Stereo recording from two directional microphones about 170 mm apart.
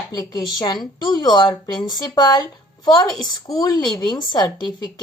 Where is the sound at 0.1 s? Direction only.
25° left (ahead or behind).